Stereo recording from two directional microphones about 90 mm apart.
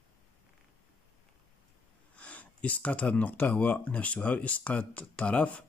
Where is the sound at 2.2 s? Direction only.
15° left (ahead or behind).